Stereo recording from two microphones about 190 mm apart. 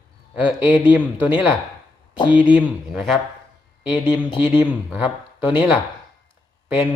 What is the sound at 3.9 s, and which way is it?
Speech, 25° left (ahead or behind).